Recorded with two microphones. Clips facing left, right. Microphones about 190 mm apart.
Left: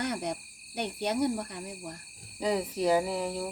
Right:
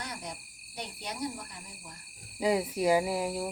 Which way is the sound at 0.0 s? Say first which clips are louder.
Left 9 dB; 65° left (ahead or behind).